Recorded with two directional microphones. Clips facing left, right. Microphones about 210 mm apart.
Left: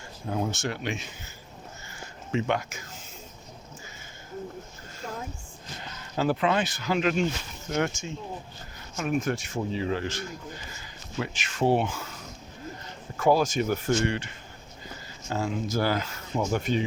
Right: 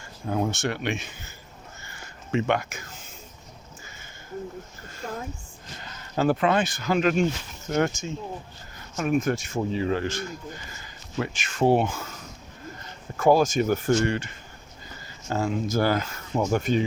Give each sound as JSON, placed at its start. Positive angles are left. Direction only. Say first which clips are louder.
{"t": 0.3, "sound": "speech", "louder": "right 3 dB", "side_deg": -60}
{"t": 2.3, "sound": "speech", "louder": "right 3 dB", "side_deg": -60}
{"t": 5.0, "sound": "a sound", "louder": "right 3 dB", "side_deg": -55}
{"t": 6.1, "sound": "speech", "louder": "right 3 dB", "side_deg": -50}
{"t": 13.1, "sound": "speech", "louder": "right 3 dB", "side_deg": -45}
{"t": 15.3, "sound": "speech", "louder": "right 3 dB", "side_deg": -50}